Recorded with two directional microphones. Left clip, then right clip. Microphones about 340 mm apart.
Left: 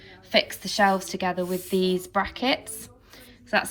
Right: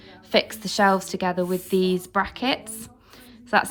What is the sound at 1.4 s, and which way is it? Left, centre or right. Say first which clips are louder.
Speech: right 3 dB; right.